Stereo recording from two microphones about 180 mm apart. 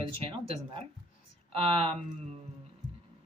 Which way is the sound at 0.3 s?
30° right (ahead or behind).